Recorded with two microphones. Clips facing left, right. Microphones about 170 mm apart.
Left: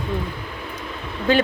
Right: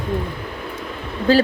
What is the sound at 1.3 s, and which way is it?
Speech, 35° right (ahead or behind).